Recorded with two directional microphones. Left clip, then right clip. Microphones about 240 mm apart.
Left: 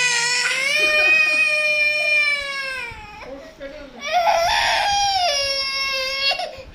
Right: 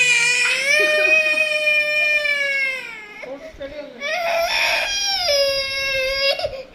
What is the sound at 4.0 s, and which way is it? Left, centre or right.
Baby cry, centre.